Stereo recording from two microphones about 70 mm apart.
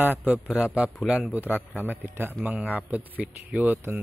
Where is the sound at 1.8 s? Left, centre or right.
Right.